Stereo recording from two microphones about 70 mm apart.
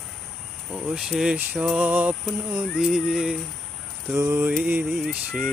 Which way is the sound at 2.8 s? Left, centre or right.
Centre.